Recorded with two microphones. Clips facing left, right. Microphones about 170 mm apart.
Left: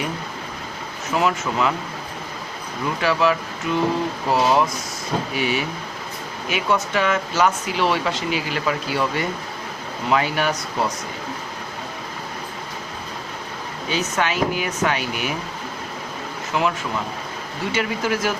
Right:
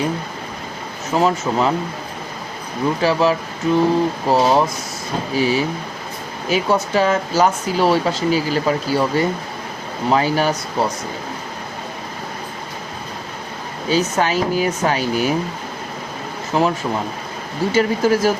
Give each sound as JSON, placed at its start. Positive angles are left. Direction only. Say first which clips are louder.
{"t": 1.1, "sound": "speech", "louder": "right 4 dB", "side_deg": -30}
{"t": 2.8, "sound": "speech", "louder": "right 3 dB", "side_deg": -30}
{"t": 13.8, "sound": "speech", "louder": "right 5 dB", "side_deg": -35}
{"t": 16.5, "sound": "speech", "louder": "right 5 dB", "side_deg": -35}